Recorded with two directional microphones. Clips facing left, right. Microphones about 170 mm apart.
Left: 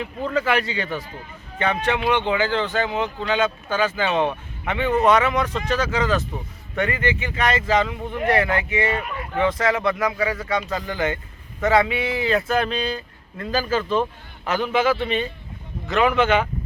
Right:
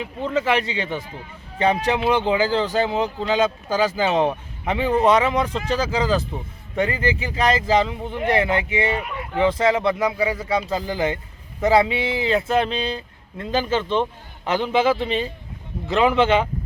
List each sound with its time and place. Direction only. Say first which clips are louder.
0.0 s speech: right 1 dB; 20° right (ahead or behind)